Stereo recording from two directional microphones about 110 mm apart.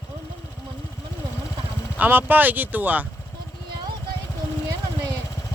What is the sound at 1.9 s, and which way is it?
Speech, 15° right (ahead or behind).